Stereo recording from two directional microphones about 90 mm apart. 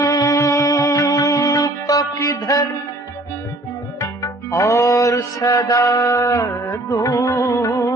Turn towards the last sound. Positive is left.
turn(degrees=40)  # may be behind; listen again after turning